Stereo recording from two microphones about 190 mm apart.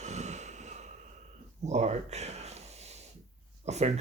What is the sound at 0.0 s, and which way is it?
Snort, 35° right (ahead or behind).